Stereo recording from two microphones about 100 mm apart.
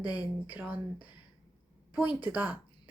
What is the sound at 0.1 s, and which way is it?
Speech, 15° right (ahead or behind).